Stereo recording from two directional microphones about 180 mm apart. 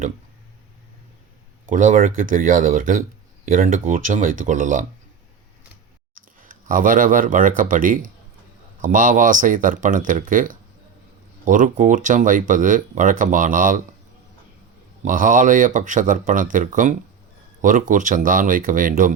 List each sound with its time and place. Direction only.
1.6 s speech: 45° right (ahead or behind)
6.4 s speech: 50° right (ahead or behind)
15.0 s speech: 45° right (ahead or behind)